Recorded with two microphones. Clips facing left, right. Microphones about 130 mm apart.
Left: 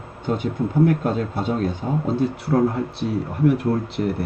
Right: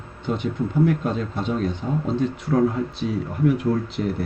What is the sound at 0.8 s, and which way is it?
Speech, 50° left (ahead or behind).